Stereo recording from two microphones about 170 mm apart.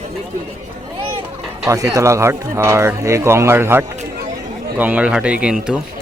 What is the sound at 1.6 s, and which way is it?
Speech, 20° right (ahead or behind).